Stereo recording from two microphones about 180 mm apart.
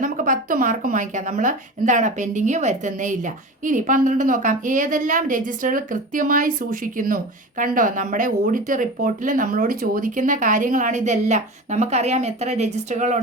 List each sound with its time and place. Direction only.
0.0 s speech: 50° right (ahead or behind)